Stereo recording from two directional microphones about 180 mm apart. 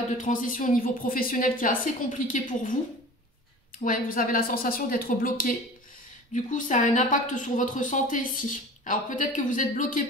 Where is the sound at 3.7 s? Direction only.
50° left (ahead or behind).